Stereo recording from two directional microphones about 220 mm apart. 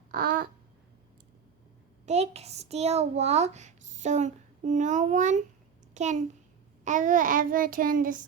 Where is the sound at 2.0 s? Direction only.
30° right (ahead or behind).